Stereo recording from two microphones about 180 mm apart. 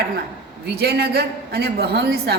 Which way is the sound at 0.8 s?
65° right (ahead or behind).